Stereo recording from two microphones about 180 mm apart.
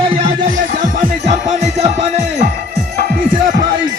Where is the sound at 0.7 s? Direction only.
45° right (ahead or behind).